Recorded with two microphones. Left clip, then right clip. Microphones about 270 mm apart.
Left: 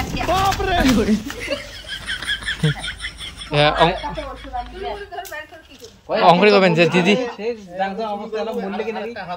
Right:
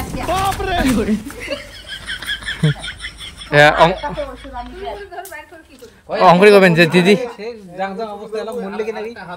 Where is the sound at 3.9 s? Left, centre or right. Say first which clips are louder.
Right 3 dB; centre.